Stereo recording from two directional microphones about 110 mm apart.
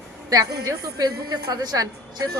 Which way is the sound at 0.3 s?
30° right (ahead or behind).